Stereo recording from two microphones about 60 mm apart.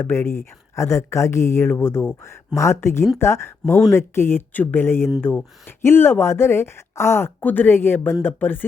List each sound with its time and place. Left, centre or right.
0.0 s speech: left
7.4 s speech: left